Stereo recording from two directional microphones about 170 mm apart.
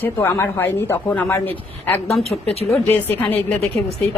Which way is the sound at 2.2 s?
35° left (ahead or behind).